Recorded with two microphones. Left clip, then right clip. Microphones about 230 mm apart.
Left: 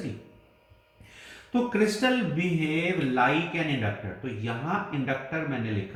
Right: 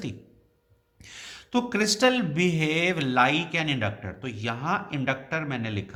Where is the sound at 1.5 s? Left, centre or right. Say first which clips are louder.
Even; right.